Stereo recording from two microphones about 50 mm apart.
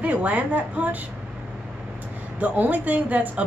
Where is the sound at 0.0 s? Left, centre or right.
Right.